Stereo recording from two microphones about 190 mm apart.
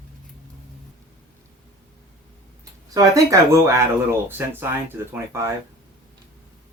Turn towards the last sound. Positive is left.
turn(degrees=-15)  # may be behind; listen again after turning